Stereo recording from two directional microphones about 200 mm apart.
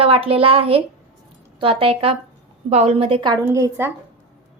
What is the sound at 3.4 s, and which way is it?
Speech, 15° right (ahead or behind).